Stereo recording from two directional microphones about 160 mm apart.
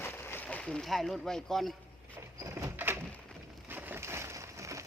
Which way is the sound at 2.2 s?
20° right (ahead or behind).